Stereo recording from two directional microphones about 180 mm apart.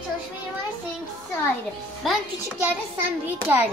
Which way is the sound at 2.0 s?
Centre (ahead or behind).